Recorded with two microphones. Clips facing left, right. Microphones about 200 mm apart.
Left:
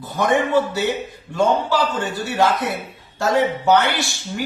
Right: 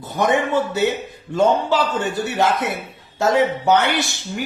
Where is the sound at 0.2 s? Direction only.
20° right (ahead or behind).